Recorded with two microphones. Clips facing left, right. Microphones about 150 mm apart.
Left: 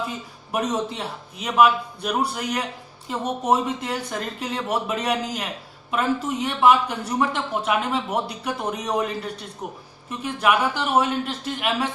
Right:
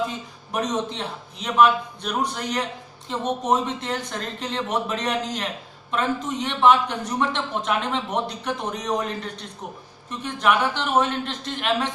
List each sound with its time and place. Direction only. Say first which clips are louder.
0.0 s speech: right 3 dB; 5° left (ahead or behind)